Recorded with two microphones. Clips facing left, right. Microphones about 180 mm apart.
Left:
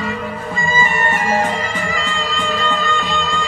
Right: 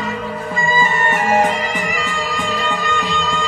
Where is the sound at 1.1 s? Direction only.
20° right (ahead or behind).